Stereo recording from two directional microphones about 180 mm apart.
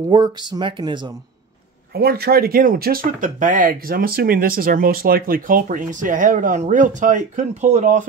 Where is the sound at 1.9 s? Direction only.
60° right (ahead or behind).